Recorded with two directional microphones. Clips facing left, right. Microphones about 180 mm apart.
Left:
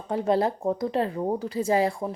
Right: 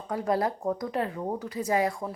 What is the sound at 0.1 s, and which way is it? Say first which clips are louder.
Speech: left 4 dB; 25° left (ahead or behind).